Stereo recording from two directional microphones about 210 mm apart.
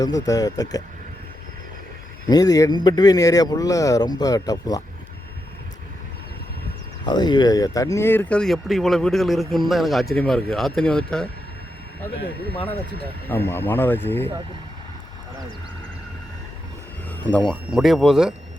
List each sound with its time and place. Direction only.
0.0 s speech: 15° left (ahead or behind)
2.2 s speech: 20° left (ahead or behind)
7.0 s speech: 20° left (ahead or behind); by 11.3 s 5° left (ahead or behind)
13.2 s speech: 10° left (ahead or behind)
17.1 s speech: 10° left (ahead or behind)